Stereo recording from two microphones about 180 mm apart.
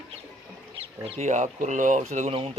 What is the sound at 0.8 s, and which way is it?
Speech, 35° right (ahead or behind).